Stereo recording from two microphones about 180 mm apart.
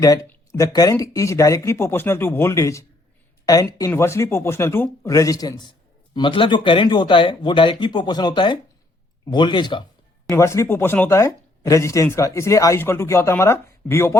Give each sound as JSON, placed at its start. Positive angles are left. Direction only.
{"t": 0.0, "sound": "speech", "side_deg": 20}